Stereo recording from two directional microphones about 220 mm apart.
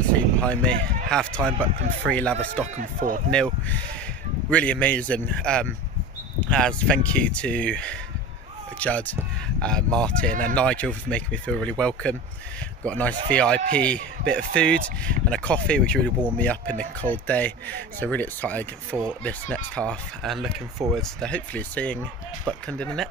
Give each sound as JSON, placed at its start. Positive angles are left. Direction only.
{"t": 0.1, "sound": "speech", "side_deg": 5}
{"t": 2.6, "sound": "speech", "side_deg": -40}
{"t": 4.5, "sound": "speech", "side_deg": 5}